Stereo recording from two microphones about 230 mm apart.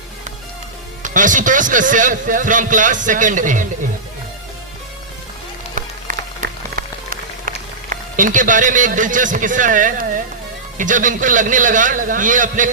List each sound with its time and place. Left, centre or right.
1.0 s a man's voice: right
6.1 s music: right
10.8 s a man's voice: right